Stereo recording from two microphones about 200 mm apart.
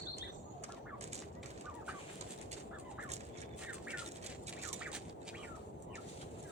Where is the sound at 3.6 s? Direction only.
5° right (ahead or behind).